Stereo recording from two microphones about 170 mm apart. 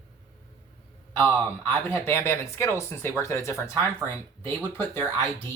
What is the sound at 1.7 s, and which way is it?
Speech, 15° left (ahead or behind).